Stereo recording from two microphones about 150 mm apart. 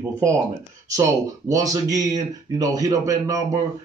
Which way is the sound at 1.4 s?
25° right (ahead or behind).